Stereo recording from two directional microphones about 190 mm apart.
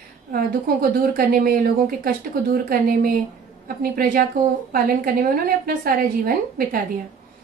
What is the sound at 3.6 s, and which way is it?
A woman's voice, 50° right (ahead or behind).